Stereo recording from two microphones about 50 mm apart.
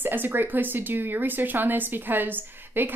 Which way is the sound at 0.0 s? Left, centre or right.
Right.